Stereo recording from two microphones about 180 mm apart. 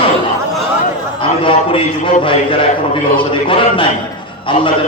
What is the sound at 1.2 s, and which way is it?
A man's voice, 30° left (ahead or behind).